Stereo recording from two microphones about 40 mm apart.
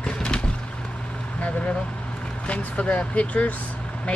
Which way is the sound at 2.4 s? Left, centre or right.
Left.